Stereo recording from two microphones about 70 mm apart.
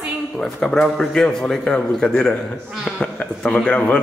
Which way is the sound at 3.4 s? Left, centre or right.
Centre.